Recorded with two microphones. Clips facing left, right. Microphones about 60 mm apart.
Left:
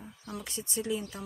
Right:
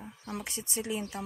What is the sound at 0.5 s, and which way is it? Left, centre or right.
Speech, centre.